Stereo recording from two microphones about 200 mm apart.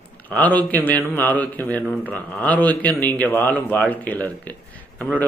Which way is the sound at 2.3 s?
5° left (ahead or behind).